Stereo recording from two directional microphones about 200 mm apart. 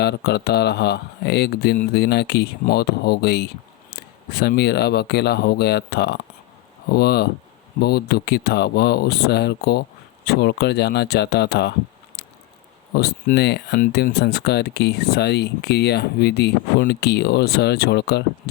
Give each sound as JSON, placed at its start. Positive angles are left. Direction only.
{"t": 0.0, "sound": "speech", "side_deg": 55}
{"t": 12.2, "sound": "squish", "side_deg": 55}
{"t": 13.0, "sound": "speech", "side_deg": 55}